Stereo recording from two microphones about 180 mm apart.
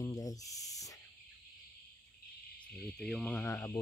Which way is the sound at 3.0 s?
Centre (ahead or behind).